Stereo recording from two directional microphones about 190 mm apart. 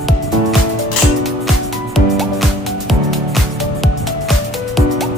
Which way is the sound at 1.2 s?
Centre (ahead or behind).